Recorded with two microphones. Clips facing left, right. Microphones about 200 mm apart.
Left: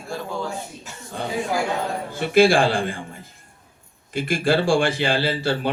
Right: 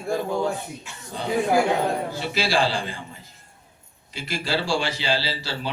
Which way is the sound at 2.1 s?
55° left (ahead or behind).